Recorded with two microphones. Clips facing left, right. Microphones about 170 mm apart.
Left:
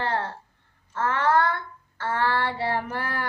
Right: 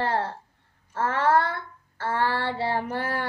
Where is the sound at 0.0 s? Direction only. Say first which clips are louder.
Right 2 dB; 30° right (ahead or behind).